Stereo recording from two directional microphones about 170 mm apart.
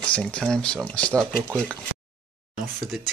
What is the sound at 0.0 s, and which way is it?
Speech, 5° left (ahead or behind).